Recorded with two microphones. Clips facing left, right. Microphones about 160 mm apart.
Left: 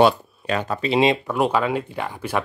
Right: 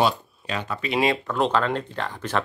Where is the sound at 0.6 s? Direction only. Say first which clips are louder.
Left 5 dB; 40° left (ahead or behind).